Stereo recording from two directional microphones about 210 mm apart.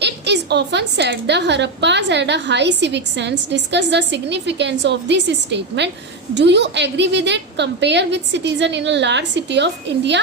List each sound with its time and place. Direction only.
0.0 s a woman's voice: 55° right (ahead or behind)